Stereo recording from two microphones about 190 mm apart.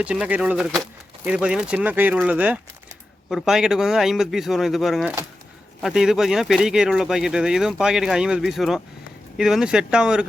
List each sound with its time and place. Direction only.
0.0 s speech: 5° right (ahead or behind)